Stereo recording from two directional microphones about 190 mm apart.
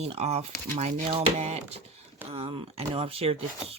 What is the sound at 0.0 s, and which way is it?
Speech, 35° right (ahead or behind).